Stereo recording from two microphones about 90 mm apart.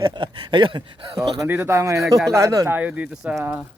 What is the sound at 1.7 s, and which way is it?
Speech, 35° right (ahead or behind).